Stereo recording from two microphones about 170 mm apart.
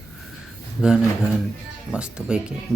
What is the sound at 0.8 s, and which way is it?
Speech, 5° right (ahead or behind).